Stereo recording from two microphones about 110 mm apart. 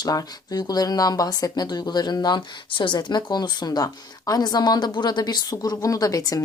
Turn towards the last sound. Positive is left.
turn(degrees=30)  # may be behind; listen again after turning